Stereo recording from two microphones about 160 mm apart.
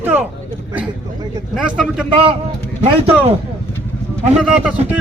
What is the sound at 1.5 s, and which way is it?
Speech, 5° right (ahead or behind).